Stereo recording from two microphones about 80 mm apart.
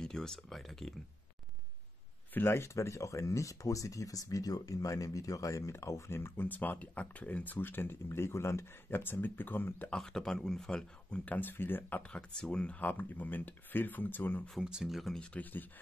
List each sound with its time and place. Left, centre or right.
0.0 s speech: centre
2.3 s speech: left
9.8 s speech: centre
11.3 s speech: left
12.0 s speech: centre
14.6 s speech: centre
15.1 s speech: centre